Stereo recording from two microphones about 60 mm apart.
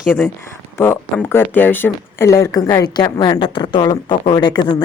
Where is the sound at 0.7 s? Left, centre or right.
Left.